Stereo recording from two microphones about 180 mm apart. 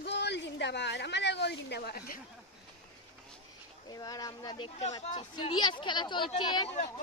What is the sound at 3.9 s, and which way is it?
A woman's voice, 20° left (ahead or behind).